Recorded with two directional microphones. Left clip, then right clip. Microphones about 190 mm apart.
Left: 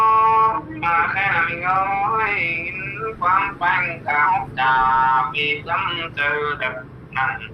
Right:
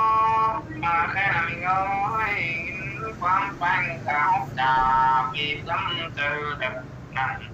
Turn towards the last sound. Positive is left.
turn(degrees=30)  # may be behind; listen again after turning